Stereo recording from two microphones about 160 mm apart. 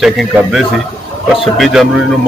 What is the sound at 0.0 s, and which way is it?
A man's voice, centre (ahead or behind).